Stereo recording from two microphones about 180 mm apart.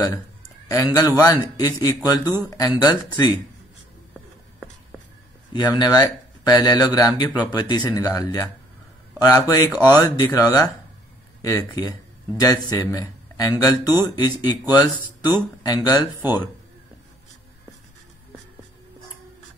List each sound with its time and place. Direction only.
0.7 s speech: 20° left (ahead or behind)
5.5 s speech: 20° left (ahead or behind)